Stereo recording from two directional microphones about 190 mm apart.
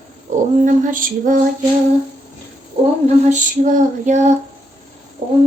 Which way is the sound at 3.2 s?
40° right (ahead or behind).